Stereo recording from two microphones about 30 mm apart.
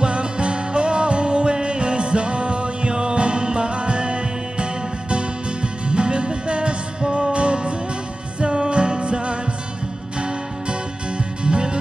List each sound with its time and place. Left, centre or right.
0.0 s music: right